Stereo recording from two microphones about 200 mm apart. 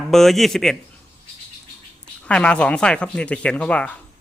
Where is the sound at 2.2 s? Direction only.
5° left (ahead or behind).